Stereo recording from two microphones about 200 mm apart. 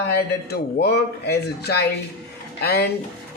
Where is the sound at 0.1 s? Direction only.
50° left (ahead or behind).